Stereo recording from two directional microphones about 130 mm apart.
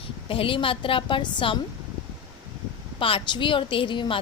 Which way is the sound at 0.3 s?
45° left (ahead or behind).